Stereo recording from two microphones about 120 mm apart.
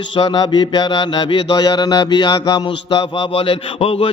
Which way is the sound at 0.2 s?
40° left (ahead or behind).